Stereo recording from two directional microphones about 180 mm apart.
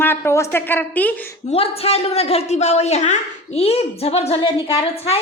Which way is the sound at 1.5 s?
35° left (ahead or behind).